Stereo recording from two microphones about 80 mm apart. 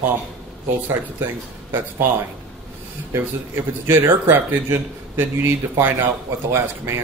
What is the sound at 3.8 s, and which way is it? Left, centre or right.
A man's voice, right.